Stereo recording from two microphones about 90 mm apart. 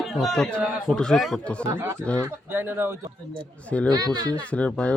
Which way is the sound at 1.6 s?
30° right (ahead or behind).